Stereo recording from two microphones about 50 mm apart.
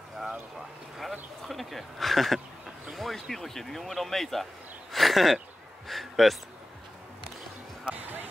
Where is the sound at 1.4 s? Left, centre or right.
Centre.